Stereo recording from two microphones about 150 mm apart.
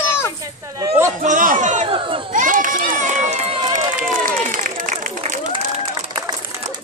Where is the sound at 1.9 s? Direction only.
35° right (ahead or behind).